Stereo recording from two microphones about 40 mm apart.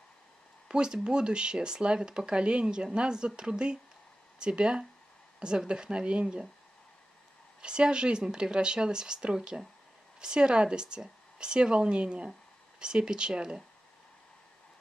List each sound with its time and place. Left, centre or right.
0.7 s speech: right
7.6 s speech: right